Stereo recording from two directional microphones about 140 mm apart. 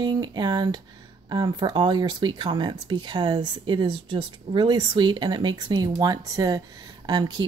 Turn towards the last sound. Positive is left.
turn(degrees=-30)  # may be behind; listen again after turning